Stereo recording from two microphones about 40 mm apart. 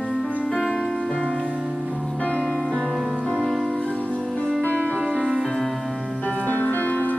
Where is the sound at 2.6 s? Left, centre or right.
Centre.